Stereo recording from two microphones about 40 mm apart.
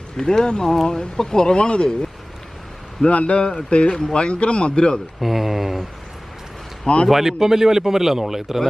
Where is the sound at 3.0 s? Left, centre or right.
Left.